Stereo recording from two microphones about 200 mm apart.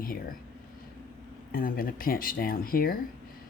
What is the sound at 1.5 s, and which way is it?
Speech, 45° left (ahead or behind).